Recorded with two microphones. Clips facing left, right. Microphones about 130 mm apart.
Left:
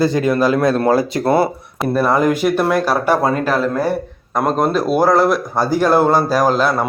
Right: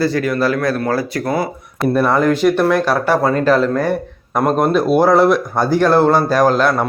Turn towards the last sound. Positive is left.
turn(degrees=5)  # may be behind; listen again after turning